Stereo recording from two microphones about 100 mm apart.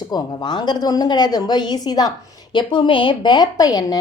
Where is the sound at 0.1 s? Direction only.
45° left (ahead or behind).